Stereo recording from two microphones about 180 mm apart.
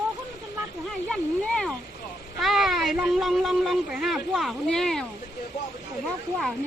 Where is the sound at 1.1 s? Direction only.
5° left (ahead or behind).